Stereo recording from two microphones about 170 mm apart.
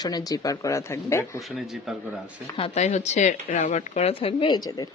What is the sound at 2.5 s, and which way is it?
Speech, 35° left (ahead or behind).